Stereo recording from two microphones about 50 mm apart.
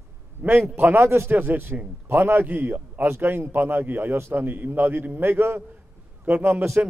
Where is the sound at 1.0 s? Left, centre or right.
Right.